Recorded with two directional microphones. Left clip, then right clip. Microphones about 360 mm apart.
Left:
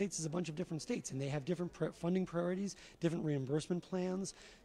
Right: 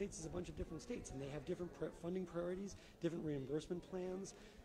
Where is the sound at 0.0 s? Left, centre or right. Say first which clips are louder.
Left 7 dB; left.